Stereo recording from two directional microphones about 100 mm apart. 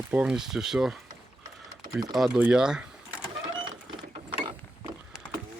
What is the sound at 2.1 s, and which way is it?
Speech, 5° right (ahead or behind).